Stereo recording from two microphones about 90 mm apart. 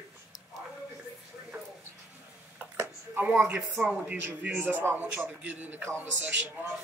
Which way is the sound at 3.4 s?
20° right (ahead or behind).